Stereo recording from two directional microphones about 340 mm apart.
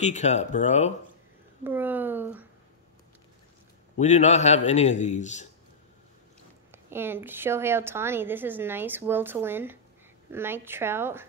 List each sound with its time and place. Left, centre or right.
0.0 s a man's voice: centre
1.6 s speech: centre
4.0 s a man's voice: centre
6.7 s a woman's voice: centre